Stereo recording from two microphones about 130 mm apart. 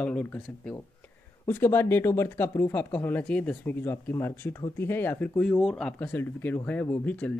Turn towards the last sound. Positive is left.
turn(degrees=10)  # may be behind; listen again after turning